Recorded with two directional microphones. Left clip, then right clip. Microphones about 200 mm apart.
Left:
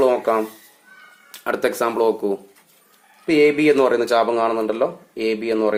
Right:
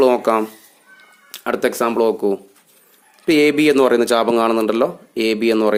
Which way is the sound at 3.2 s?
40° right (ahead or behind).